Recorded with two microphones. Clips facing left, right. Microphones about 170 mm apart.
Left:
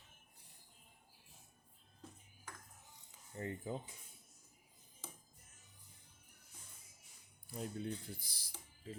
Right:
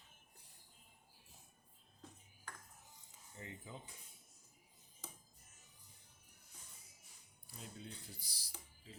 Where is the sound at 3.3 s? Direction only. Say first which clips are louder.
Left 9 dB; 50° left (ahead or behind).